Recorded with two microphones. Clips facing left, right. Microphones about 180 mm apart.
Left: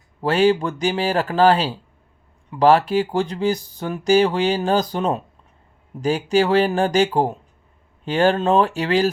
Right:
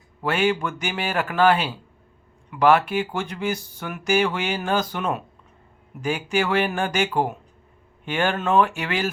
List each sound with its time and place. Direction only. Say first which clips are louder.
0.2 s speech: left 5 dB; 35° left (ahead or behind)